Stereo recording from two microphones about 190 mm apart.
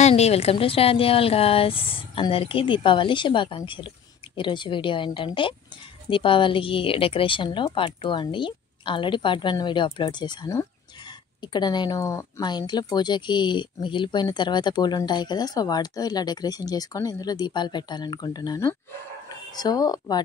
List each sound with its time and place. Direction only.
0.0 s speech: 35° left (ahead or behind)